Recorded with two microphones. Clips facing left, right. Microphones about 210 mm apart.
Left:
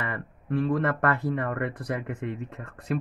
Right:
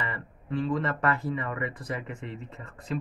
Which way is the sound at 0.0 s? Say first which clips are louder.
Left 3 dB; 60° left (ahead or behind).